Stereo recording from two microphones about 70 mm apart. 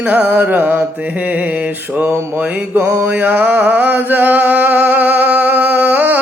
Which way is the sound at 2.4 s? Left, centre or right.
Right.